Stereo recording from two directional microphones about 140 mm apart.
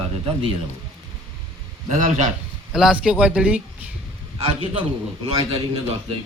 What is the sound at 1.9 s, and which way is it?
Speech, 55° right (ahead or behind).